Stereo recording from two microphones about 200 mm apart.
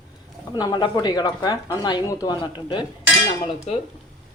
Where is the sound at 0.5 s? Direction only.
20° left (ahead or behind).